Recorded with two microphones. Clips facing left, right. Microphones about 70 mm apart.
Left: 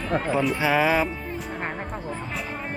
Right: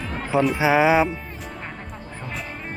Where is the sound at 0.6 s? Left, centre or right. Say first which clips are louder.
Right 5 dB; centre.